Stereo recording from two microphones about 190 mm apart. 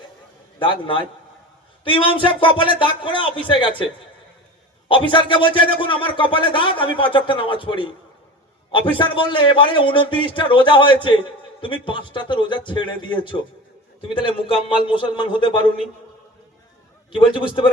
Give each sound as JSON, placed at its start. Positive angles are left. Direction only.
{"t": 0.6, "sound": "a man's voice", "side_deg": 25}
{"t": 4.9, "sound": "a man's voice", "side_deg": 25}
{"t": 17.2, "sound": "a man's voice", "side_deg": 25}